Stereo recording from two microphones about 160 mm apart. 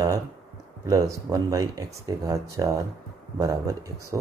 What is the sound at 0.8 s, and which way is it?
Speech, 20° right (ahead or behind).